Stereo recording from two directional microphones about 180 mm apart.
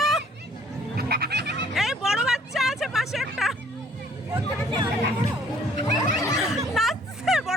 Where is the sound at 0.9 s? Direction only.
60° right (ahead or behind).